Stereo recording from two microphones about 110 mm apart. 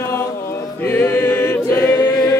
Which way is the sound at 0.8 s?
25° left (ahead or behind).